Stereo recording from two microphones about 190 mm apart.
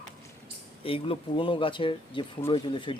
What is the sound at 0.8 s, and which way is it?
Speech, 30° left (ahead or behind).